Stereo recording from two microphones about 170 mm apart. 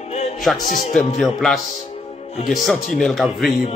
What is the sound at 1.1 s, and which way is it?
A man's voice, centre (ahead or behind).